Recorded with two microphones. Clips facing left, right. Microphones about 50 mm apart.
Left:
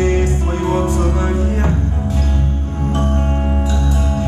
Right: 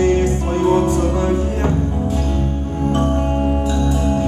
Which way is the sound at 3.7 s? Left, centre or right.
Centre.